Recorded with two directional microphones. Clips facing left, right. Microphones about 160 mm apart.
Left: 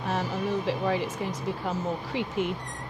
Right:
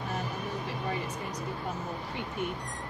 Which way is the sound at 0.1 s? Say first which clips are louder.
Left 9 dB; 90° left.